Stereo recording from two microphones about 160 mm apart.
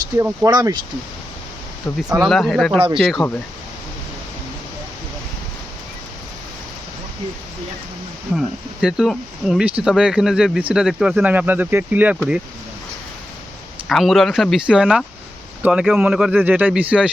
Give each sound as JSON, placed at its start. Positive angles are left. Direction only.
{"t": 0.2, "sound": "speech", "side_deg": -20}
{"t": 2.2, "sound": "speech", "side_deg": 0}
{"t": 2.7, "sound": "speech", "side_deg": -35}
{"t": 3.2, "sound": "speech", "side_deg": 0}
{"t": 8.4, "sound": "speech", "side_deg": -5}
{"t": 13.8, "sound": "speech", "side_deg": 0}